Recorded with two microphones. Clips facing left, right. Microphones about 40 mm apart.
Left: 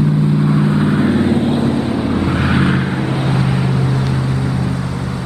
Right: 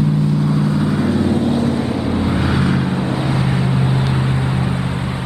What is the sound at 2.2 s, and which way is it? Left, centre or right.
Vehicle, left.